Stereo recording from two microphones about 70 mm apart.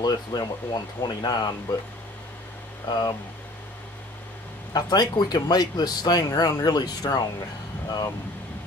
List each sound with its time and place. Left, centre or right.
0.0 s speech: left
2.9 s speech: left
4.7 s speech: left